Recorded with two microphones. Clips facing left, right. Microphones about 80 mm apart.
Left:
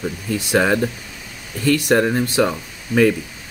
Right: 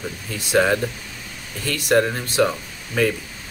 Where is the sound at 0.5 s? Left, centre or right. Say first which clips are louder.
Even; centre.